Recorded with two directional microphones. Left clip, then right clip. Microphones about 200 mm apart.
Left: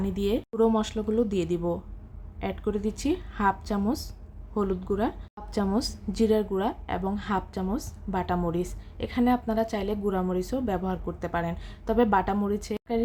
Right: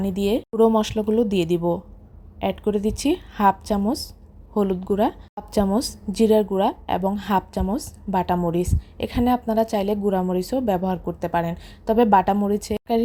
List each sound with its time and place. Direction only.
0.0 s a woman's voice: 20° right (ahead or behind)